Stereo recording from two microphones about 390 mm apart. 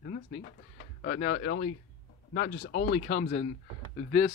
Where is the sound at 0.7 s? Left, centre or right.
Left.